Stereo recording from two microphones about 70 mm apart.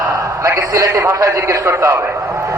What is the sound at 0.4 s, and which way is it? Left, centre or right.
A man's voice, right.